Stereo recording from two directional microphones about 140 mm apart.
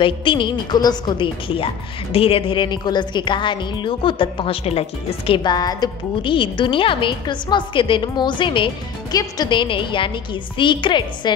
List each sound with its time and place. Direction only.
0.0 s a woman's voice: 35° left (ahead or behind)